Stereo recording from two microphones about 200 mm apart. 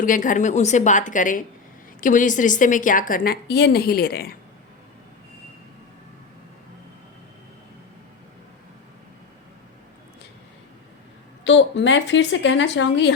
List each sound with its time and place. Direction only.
0.0 s a woman's voice: 40° left (ahead or behind)
11.4 s speech: 65° left (ahead or behind)